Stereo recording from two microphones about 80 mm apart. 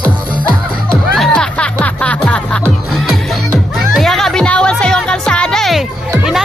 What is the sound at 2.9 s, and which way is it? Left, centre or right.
Music, centre.